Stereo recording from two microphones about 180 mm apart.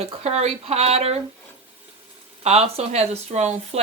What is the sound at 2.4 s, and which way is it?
Speech, 35° right (ahead or behind).